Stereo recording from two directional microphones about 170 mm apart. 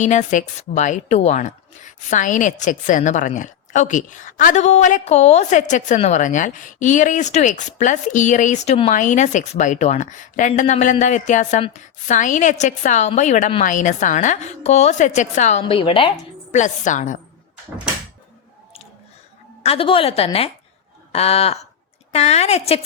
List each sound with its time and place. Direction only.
0.0 s a woman's voice: 45° left (ahead or behind)
15.6 s a woman's voice: 30° left (ahead or behind)
16.6 s a woman's voice: 45° left (ahead or behind)
19.6 s a woman's voice: 35° left (ahead or behind)
21.1 s a sound: 40° left (ahead or behind)
22.1 s a woman's voice: 40° left (ahead or behind)